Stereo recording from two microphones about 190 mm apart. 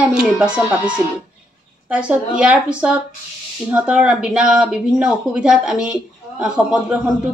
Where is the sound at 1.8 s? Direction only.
5° right (ahead or behind).